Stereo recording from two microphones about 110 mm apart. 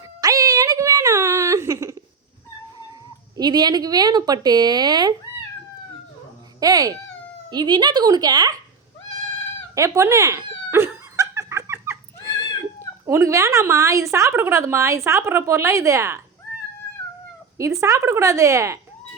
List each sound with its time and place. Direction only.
0.0 s music: 35° right (ahead or behind)
3.3 s a woman's voice: 40° right (ahead or behind)
6.6 s a woman's voice: 35° right (ahead or behind)
9.7 s dog: 30° right (ahead or behind)
13.1 s a woman's voice: 25° right (ahead or behind)
17.6 s a woman's voice: 30° right (ahead or behind)